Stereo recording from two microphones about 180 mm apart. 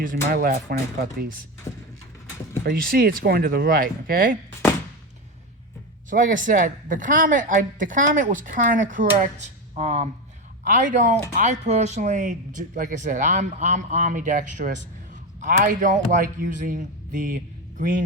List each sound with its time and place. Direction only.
0.0 s speech: 50° right (ahead or behind)
2.6 s speech: 55° right (ahead or behind)
6.1 s a man's voice: 45° right (ahead or behind)